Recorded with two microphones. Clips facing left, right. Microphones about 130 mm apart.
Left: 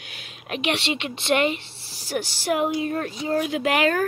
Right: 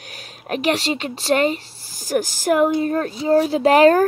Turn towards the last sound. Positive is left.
turn(degrees=-35)  # may be behind; listen again after turning